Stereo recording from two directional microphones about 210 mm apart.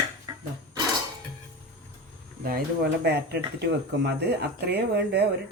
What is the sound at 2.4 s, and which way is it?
Speech, 45° right (ahead or behind).